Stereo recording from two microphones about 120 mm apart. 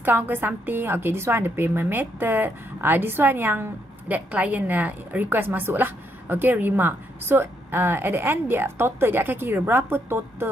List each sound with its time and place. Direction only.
0.0 s a woman's voice: 15° right (ahead or behind)